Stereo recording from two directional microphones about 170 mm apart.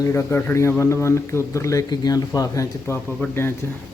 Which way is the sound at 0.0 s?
15° left (ahead or behind).